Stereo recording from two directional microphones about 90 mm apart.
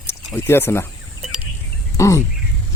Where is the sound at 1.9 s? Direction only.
35° left (ahead or behind).